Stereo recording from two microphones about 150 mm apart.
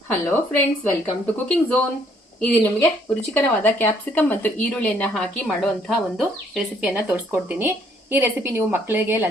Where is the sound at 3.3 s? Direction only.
15° left (ahead or behind).